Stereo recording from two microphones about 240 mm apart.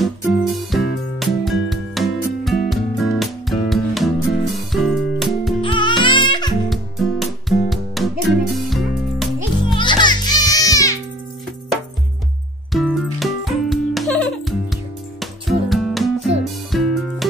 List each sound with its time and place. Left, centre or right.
0.6 s music: centre
5.6 s music: centre
6.7 s music: centre
9.8 s music: centre
12.7 s music: centre